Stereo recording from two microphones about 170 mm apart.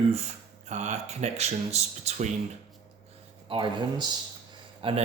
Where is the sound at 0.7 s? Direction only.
45° right (ahead or behind).